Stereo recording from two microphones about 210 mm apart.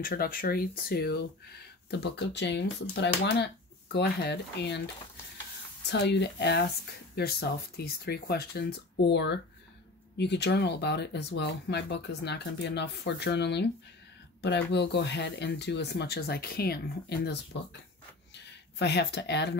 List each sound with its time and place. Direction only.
0.0 s speech: 45° left (ahead or behind)
5.9 s speech: 55° left (ahead or behind)
18.8 s speech: 55° left (ahead or behind)